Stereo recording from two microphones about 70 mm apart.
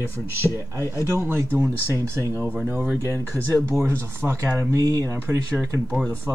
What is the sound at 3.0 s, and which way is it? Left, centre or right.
Speech, right.